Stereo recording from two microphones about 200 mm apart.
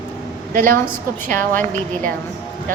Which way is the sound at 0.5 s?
45° right (ahead or behind).